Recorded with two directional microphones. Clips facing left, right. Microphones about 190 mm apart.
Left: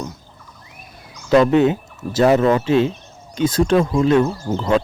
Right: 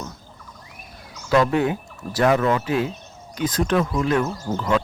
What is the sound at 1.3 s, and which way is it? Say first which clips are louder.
Speech: left 6 dB; 25° left (ahead or behind).